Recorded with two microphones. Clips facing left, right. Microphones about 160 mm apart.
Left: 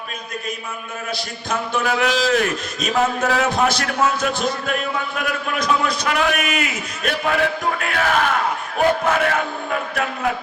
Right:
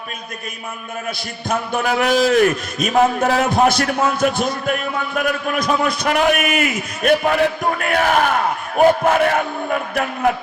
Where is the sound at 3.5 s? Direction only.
55° right (ahead or behind).